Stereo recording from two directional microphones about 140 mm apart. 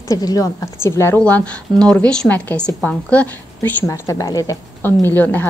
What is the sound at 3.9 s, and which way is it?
A woman's voice, 25° left (ahead or behind).